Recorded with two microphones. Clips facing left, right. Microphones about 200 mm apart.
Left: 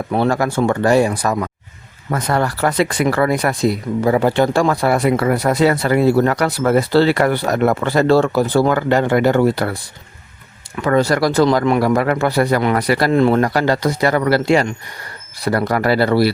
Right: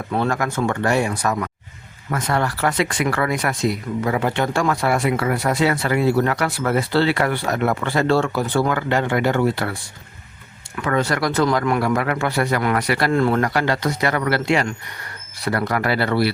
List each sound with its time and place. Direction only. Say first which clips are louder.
0.2 s speech: left 5 dB; 30° left (ahead or behind)
10.8 s speech: left 6 dB; 35° left (ahead or behind)
11.8 s speech: left 5 dB; 35° left (ahead or behind)
13.1 s speech: left 5 dB; 20° left (ahead or behind)
13.4 s speech: left 4 dB; 35° left (ahead or behind)